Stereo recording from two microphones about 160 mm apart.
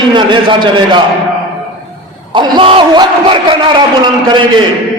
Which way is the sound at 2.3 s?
30° right (ahead or behind).